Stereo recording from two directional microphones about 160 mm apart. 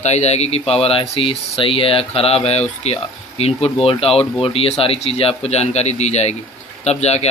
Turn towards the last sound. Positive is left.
turn(degrees=40)  # may be behind; listen again after turning